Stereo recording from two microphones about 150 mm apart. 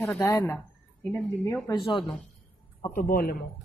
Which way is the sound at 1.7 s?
30° left (ahead or behind).